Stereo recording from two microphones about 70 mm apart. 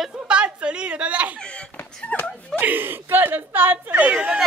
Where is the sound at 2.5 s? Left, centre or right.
Right.